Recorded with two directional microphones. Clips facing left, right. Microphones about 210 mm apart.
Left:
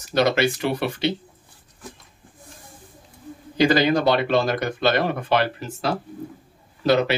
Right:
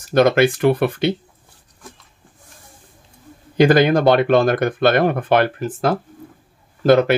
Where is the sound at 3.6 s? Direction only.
55° right (ahead or behind).